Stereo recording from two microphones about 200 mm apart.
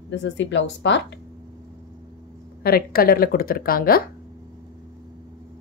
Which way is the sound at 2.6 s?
50° left (ahead or behind).